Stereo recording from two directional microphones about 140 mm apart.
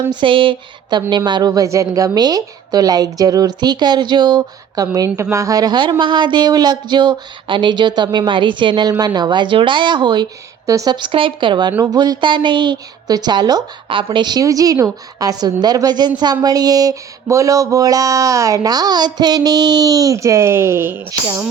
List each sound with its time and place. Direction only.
0.1 s a woman's voice: 35° right (ahead or behind); by 21.2 s 15° right (ahead or behind)